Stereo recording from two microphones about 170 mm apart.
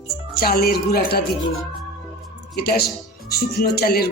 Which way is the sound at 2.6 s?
60° left (ahead or behind).